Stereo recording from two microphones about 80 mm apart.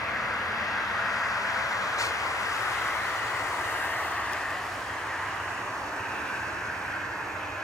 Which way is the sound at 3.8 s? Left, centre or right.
Centre.